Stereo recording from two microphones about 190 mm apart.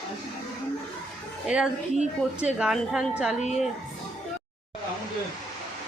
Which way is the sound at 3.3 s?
35° left (ahead or behind).